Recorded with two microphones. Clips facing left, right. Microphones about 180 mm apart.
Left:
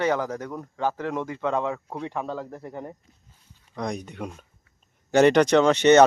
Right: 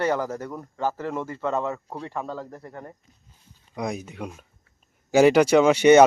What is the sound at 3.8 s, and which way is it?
Speech, 5° right (ahead or behind).